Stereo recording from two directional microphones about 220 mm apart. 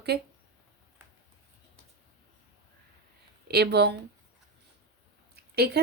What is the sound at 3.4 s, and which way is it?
Speech, 45° right (ahead or behind).